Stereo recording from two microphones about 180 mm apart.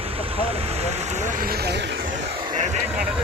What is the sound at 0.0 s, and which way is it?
Vehicle, 30° right (ahead or behind).